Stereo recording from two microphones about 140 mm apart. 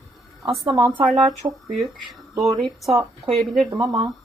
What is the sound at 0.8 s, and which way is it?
Speech, 35° right (ahead or behind).